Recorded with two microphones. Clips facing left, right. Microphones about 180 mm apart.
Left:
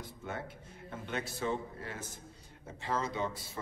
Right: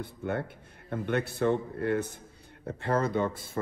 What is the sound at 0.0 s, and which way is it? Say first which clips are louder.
Speech: right 9 dB; 60° right (ahead or behind).